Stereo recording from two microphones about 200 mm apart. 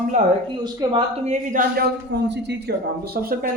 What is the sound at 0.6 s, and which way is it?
Speech, 20° right (ahead or behind).